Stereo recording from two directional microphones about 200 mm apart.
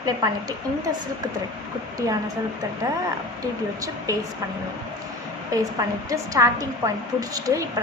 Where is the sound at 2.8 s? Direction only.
15° right (ahead or behind).